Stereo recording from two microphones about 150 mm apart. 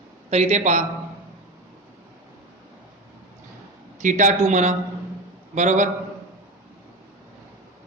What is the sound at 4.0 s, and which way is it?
Speech, 55° right (ahead or behind).